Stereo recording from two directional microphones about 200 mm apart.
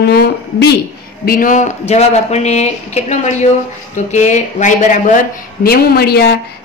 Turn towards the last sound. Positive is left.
turn(degrees=50)  # may be behind; listen again after turning